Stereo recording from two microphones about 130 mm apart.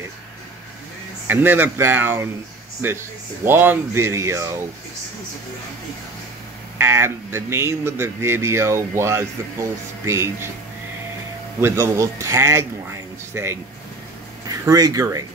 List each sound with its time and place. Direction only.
1.2 s speech: 15° right (ahead or behind)
3.4 s speech: 15° right (ahead or behind)
6.8 s speech: 20° right (ahead or behind)
11.6 s speech: 20° right (ahead or behind)